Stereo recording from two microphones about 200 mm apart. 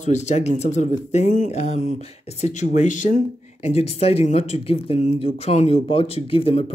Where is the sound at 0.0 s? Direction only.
35° left (ahead or behind).